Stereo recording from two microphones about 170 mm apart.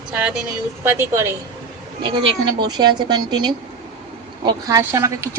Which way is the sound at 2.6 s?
25° right (ahead or behind).